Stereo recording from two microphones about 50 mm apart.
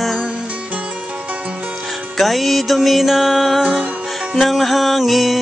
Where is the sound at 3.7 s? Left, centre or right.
Right.